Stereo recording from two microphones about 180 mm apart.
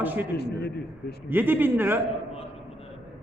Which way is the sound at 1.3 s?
10° right (ahead or behind).